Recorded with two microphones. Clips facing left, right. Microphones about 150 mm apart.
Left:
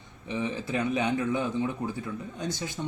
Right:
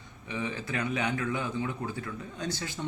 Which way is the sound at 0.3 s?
20° left (ahead or behind).